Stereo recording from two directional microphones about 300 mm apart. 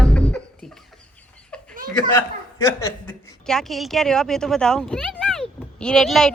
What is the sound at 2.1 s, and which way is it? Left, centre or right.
A woman's voice, centre.